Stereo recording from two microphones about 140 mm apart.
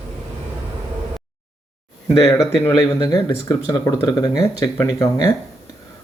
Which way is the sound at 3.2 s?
20° left (ahead or behind).